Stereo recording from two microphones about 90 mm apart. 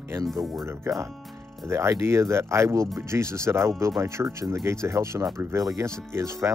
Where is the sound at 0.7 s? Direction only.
35° right (ahead or behind).